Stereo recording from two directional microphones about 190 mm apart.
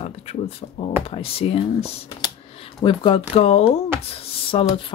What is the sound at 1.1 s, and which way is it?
Speech, 30° left (ahead or behind).